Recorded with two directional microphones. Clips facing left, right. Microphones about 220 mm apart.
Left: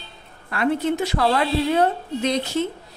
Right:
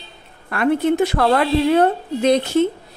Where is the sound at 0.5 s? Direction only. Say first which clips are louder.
Right 4 dB; 55° right (ahead or behind).